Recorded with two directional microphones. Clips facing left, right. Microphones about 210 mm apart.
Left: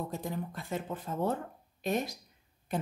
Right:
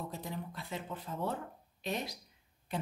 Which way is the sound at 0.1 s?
45° left (ahead or behind).